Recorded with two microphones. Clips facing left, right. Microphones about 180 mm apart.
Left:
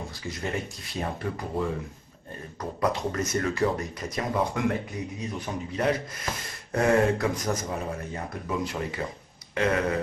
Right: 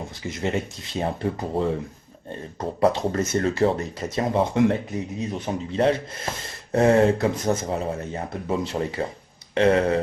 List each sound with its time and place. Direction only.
0.2 s speech: 20° right (ahead or behind)